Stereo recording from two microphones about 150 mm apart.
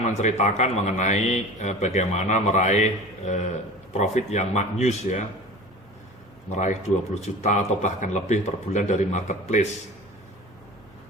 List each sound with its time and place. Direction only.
0.0 s a man's voice: 50° left (ahead or behind)
6.5 s a man's voice: 55° left (ahead or behind)